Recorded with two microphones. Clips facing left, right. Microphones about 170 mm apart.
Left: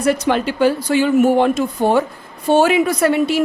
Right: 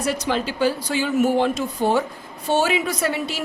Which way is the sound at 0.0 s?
60° left (ahead or behind).